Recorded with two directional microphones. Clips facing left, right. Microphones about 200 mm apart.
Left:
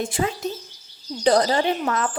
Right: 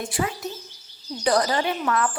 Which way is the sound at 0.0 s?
25° left (ahead or behind).